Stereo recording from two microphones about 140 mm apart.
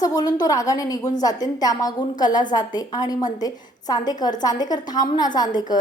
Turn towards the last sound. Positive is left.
turn(degrees=30)  # may be behind; listen again after turning